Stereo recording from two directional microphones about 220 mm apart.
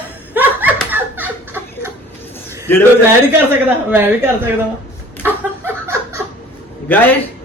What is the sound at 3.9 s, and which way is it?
Speech, 10° right (ahead or behind).